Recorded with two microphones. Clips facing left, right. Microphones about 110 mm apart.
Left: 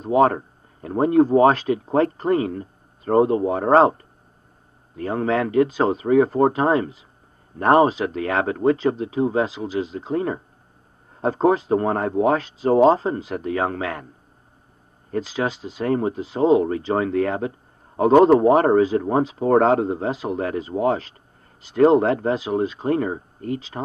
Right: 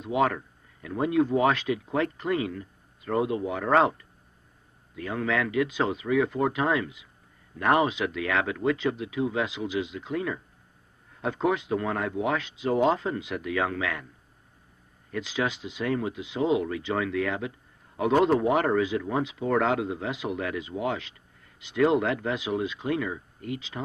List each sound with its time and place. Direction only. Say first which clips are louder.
0.0 s speech: left 8 dB; 35° left (ahead or behind)
15.0 s speech: left 5 dB; 40° left (ahead or behind)